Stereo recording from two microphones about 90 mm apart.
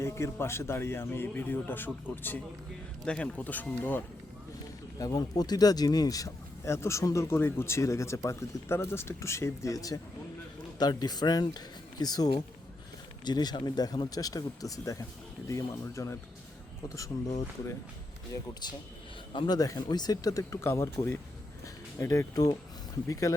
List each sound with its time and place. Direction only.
0.0 s speech: 30° left (ahead or behind)
4.9 s speech: 45° left (ahead or behind)
6.7 s speech: 30° left (ahead or behind)
18.6 s speech: 55° left (ahead or behind)
19.3 s a man's voice: 65° left (ahead or behind)
19.5 s speech: 45° left (ahead or behind)